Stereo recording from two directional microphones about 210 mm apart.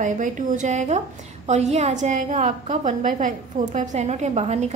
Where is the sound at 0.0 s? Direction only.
40° right (ahead or behind).